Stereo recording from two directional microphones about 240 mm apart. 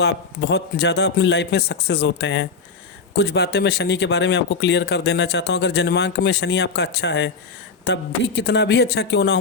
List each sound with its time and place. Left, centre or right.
0.0 s speech: left